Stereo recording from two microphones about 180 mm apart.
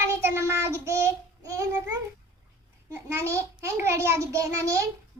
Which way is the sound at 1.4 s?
20° right (ahead or behind).